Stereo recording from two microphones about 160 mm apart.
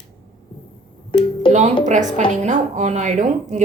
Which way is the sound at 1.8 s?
50° right (ahead or behind).